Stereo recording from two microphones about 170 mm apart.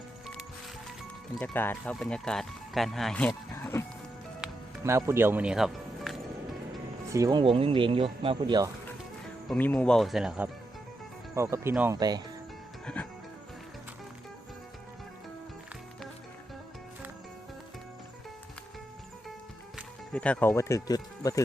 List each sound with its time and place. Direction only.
1.4 s speech: 10° left (ahead or behind)
4.4 s music: centre (ahead or behind)
4.8 s speech: 15° right (ahead or behind)
7.1 s speech: 20° right (ahead or behind)
9.5 s speech: 10° left (ahead or behind)
11.3 s speech: 15° right (ahead or behind)
11.9 s speech: 25° right (ahead or behind)
12.8 s music: 5° left (ahead or behind)
20.1 s speech: 10° left (ahead or behind)